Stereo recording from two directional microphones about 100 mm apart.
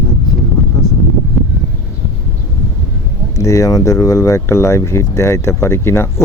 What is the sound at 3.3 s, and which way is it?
Speech, 30° left (ahead or behind).